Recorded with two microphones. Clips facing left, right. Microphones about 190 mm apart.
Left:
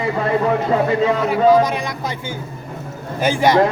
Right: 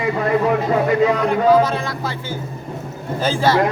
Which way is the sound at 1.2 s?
10° left (ahead or behind).